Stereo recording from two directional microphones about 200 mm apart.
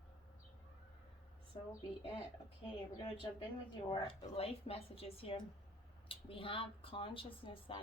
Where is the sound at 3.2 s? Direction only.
20° left (ahead or behind).